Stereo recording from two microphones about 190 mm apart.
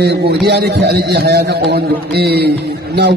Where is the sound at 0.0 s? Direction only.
60° right (ahead or behind).